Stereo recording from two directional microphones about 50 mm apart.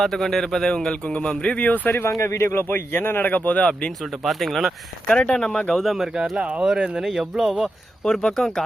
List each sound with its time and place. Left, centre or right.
0.0 s speech: centre; by 1.9 s left
2.0 s speech: left
2.5 s speech: left; by 3.9 s centre
4.0 s speech: centre
5.0 s speech: left
5.8 s speech: centre
6.3 s speech: right
8.0 s speech: centre